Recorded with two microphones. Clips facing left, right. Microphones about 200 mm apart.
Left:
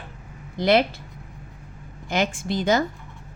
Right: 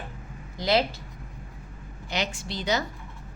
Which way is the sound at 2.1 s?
50° left (ahead or behind).